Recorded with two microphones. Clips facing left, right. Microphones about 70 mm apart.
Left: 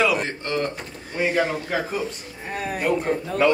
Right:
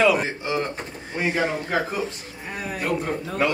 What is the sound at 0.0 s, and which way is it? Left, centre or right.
A man's voice, centre.